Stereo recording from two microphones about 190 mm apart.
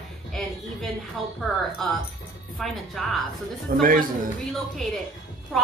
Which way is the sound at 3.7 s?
50° right (ahead or behind).